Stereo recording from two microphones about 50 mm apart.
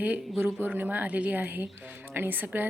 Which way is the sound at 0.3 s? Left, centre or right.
Right.